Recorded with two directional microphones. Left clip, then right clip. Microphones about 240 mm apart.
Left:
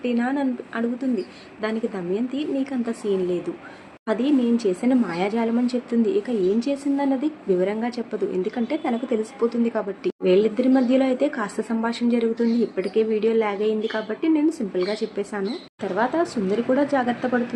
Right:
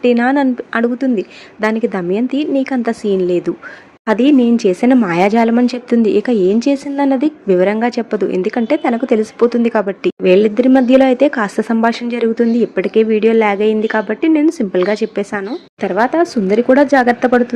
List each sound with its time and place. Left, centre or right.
0.0 s speech: right